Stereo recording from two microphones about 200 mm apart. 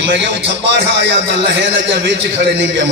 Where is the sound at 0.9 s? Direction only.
60° right (ahead or behind).